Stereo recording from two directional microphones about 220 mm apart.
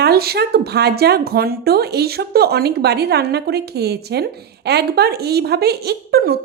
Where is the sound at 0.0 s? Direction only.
45° right (ahead or behind).